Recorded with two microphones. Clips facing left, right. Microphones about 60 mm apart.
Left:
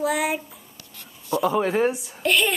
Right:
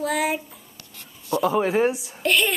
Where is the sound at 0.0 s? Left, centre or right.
Centre.